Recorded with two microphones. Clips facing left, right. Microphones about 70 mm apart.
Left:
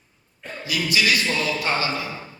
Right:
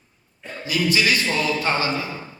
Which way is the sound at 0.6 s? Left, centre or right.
Right.